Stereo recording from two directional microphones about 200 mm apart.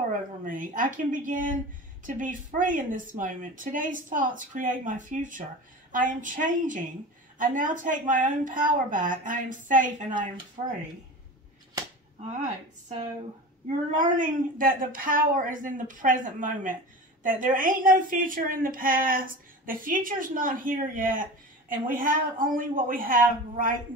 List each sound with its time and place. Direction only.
0.1 s speech: 40° right (ahead or behind)
13.7 s a woman's voice: 40° right (ahead or behind)